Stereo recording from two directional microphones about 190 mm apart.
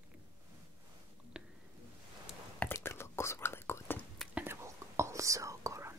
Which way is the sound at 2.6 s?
15° left (ahead or behind).